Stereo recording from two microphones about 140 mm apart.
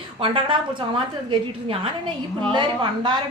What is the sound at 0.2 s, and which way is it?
A woman's voice, 40° right (ahead or behind).